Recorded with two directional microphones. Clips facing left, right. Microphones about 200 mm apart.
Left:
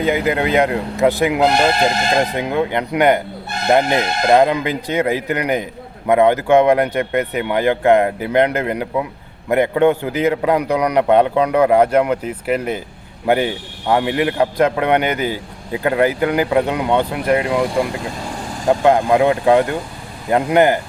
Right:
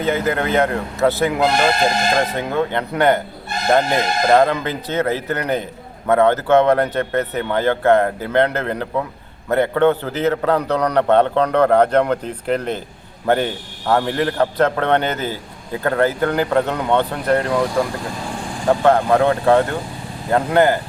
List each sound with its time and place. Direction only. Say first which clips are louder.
0.0 s a man's voice: left 2 dB; 15° left (ahead or behind)